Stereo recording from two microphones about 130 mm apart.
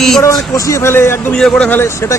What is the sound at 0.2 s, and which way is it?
Speech, 25° left (ahead or behind).